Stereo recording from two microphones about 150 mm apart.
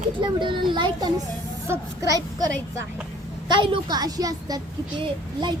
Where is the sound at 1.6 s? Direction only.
20° right (ahead or behind).